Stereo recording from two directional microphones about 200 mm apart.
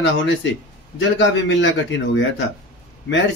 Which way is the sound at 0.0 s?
65° left (ahead or behind).